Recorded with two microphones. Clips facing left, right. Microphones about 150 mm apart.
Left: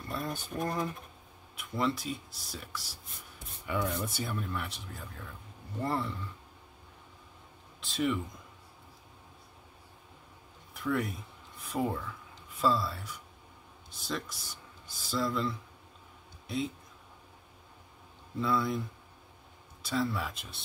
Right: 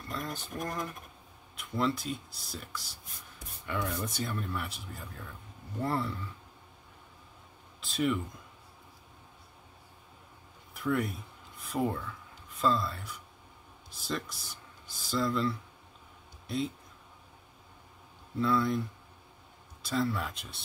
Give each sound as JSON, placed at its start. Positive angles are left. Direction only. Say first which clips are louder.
{"t": 0.2, "sound": "speech", "louder": "left 4 dB", "side_deg": 25}
{"t": 1.6, "sound": "speech", "louder": "right 1 dB", "side_deg": 0}
{"t": 7.8, "sound": "speech", "louder": "right 1 dB", "side_deg": 0}
{"t": 10.7, "sound": "speech", "louder": "right 1 dB", "side_deg": 0}
{"t": 18.4, "sound": "speech", "louder": "right 2 dB", "side_deg": 0}
{"t": 19.8, "sound": "speech", "louder": "right 1 dB", "side_deg": 0}